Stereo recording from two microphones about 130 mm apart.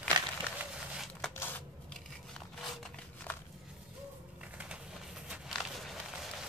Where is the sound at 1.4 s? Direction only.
15° left (ahead or behind).